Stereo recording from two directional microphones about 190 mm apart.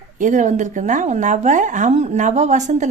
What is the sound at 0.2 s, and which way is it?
Speech, 40° right (ahead or behind).